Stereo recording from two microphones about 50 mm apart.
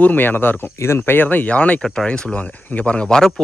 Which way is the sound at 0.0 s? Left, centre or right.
Left.